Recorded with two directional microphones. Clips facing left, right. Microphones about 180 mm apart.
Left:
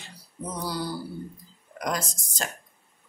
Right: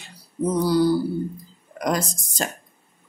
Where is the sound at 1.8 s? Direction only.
35° right (ahead or behind).